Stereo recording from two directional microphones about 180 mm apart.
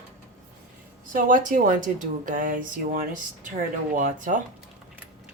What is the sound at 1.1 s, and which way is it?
Speech, 50° right (ahead or behind).